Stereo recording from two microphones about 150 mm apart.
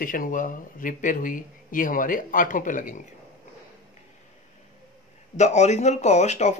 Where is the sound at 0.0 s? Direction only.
65° left (ahead or behind).